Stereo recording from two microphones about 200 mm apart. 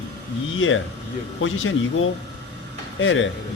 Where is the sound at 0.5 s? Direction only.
85° left.